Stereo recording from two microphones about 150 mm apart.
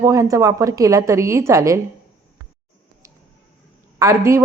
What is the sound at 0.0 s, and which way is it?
A woman's voice, 20° right (ahead or behind).